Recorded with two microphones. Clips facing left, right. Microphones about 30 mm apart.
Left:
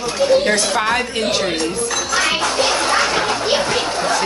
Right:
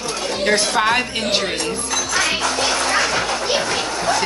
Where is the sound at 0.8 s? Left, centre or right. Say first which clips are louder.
Even; centre.